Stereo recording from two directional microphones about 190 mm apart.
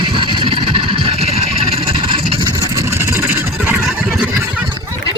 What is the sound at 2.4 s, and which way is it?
Vehicle, 15° right (ahead or behind).